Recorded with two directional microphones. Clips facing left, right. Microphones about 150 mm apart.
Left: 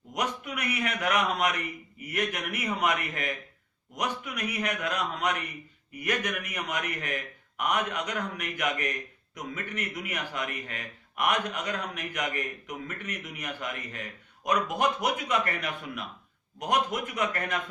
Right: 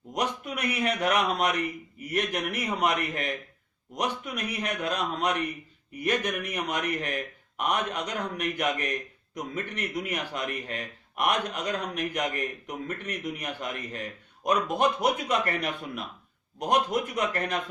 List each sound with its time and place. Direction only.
0.1 s a man's voice: 30° right (ahead or behind)